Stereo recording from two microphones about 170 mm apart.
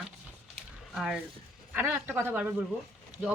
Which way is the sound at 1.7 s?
10° right (ahead or behind).